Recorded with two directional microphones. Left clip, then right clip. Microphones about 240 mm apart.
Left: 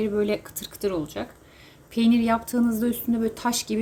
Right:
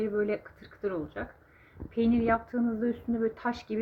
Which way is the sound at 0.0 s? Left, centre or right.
Centre.